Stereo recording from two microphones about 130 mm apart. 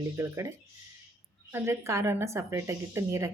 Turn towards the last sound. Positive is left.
turn(degrees=-20)  # may be behind; listen again after turning